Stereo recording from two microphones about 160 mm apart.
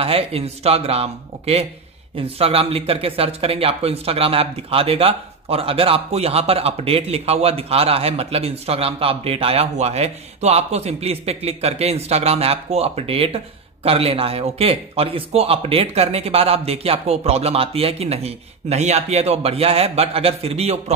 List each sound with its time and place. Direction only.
0.0 s speech: 40° right (ahead or behind)